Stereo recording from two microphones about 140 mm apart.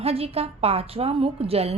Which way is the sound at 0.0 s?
45° right (ahead or behind).